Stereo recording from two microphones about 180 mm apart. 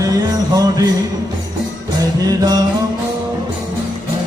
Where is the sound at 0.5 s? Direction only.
20° right (ahead or behind).